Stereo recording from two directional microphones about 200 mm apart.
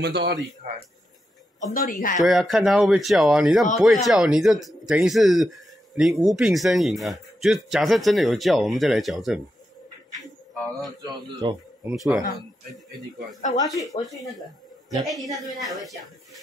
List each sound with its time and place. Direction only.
0.0 s speech: 55° right (ahead or behind)
1.7 s speech: 45° left (ahead or behind)
2.1 s speech: centre (ahead or behind)
11.0 s speech: 20° right (ahead or behind)
11.8 s speech: 5° right (ahead or behind)
13.4 s speech: 35° left (ahead or behind)
15.0 s speech: centre (ahead or behind)